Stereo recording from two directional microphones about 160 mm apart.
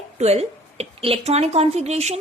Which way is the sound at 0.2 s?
40° right (ahead or behind).